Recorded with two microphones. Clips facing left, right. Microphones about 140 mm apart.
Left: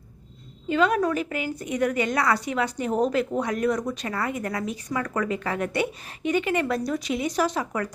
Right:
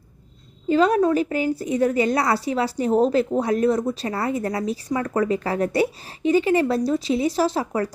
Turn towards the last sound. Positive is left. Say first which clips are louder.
# right 4 dB
turn(degrees=-30)  # may be behind; listen again after turning